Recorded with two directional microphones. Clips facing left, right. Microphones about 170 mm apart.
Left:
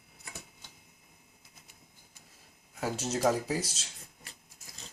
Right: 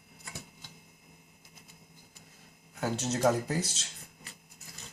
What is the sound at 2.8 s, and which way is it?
Speech, 5° left (ahead or behind).